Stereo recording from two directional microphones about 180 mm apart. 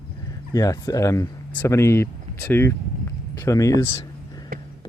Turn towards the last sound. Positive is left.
turn(degrees=20)  # may be behind; listen again after turning